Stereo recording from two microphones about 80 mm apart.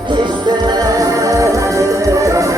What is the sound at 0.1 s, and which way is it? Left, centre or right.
Music, right.